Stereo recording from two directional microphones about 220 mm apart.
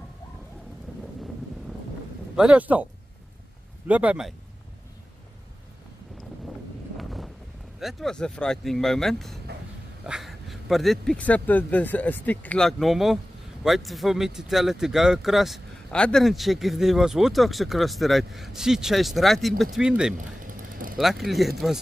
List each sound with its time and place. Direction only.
2.3 s speech: 5° right (ahead or behind)
7.0 s wind noise: centre (ahead or behind)
7.8 s speech: centre (ahead or behind)
20.2 s vehicle: 40° right (ahead or behind)
21.0 s speech: centre (ahead or behind)